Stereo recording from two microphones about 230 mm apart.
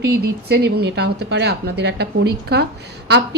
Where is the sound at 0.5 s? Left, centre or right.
Right.